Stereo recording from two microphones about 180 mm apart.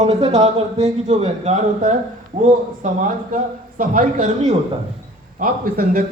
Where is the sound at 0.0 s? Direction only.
40° right (ahead or behind).